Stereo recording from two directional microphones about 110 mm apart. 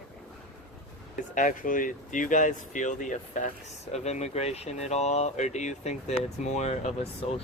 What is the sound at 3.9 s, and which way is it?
Speech, 85° left.